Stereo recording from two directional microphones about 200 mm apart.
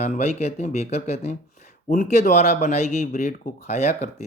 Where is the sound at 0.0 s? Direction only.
35° left (ahead or behind).